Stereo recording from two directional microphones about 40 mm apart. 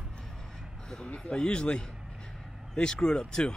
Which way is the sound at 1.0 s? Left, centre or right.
Left.